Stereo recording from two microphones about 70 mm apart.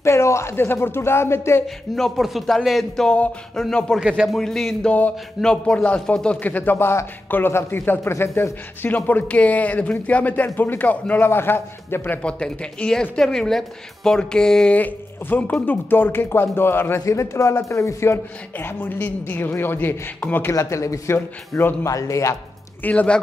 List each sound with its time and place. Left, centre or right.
0.0 s a man's voice: left
2.0 s a woman's voice: centre
4.8 s a man's voice: left
5.4 s a man's voice: centre; by 12.2 s left
12.2 s a woman's voice: centre
14.8 s a man's voice: left
17.0 s a man's voice: left
20.5 s a man's voice: left
22.8 s a woman's voice: centre